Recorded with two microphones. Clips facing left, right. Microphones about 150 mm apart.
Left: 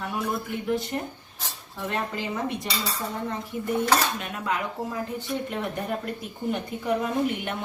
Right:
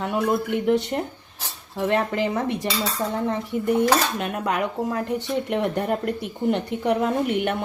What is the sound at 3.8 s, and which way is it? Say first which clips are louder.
Speech: right 2 dB; 60° right (ahead or behind).